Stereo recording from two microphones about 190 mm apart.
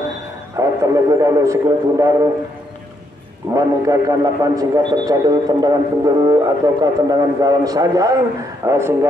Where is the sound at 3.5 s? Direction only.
15° right (ahead or behind).